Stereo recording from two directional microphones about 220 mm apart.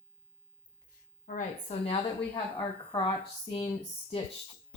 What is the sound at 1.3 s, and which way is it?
A woman's voice, 30° left (ahead or behind).